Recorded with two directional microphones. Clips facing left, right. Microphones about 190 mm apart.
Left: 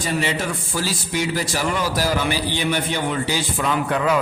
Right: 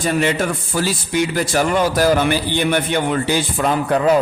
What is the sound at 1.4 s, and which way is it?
A man's voice, 55° right (ahead or behind).